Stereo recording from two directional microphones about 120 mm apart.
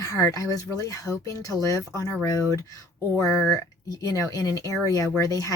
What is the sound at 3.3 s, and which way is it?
Speech, centre (ahead or behind).